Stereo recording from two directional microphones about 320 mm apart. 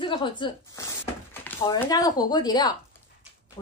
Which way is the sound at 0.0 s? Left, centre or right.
Centre.